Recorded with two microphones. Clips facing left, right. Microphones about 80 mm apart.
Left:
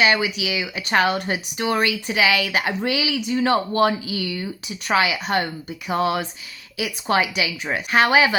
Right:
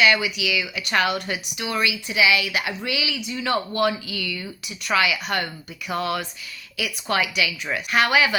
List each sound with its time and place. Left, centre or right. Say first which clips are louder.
0.0 s speech: left 1 dB; left